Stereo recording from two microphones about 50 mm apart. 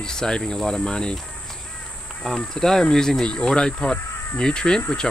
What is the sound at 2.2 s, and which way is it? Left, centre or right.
Speech, centre.